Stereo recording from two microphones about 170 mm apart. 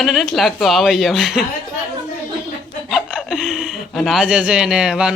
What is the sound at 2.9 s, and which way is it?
Speech, centre (ahead or behind).